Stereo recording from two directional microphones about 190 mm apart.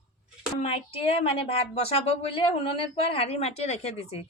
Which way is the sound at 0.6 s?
30° left (ahead or behind).